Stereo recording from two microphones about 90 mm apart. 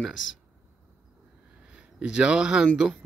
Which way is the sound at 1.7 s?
10° right (ahead or behind).